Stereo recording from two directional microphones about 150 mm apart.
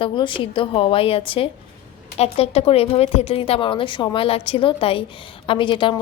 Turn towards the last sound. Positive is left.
turn(degrees=35)  # may be behind; listen again after turning